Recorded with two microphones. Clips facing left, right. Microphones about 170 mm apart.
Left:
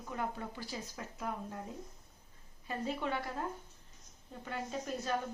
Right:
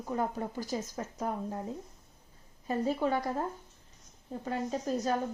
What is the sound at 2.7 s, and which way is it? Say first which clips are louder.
Speech: right 7 dB; 40° right (ahead or behind).